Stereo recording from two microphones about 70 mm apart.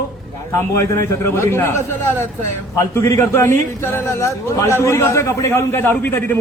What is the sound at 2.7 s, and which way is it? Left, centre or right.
A man's voice, left.